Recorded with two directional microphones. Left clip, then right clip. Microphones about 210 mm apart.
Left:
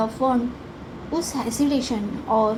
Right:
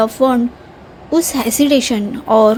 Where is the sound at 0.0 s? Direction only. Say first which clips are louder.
Right 9 dB; 55° right (ahead or behind).